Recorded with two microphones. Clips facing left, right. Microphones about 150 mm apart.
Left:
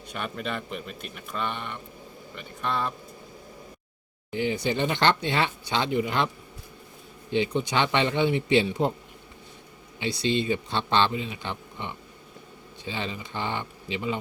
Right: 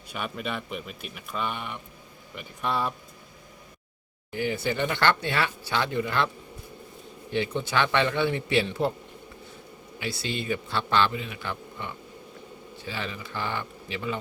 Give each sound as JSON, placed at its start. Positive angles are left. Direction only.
{"t": 0.1, "sound": "a man's voice", "side_deg": -5}
{"t": 4.3, "sound": "speech", "side_deg": 20}
{"t": 10.0, "sound": "speech", "side_deg": 20}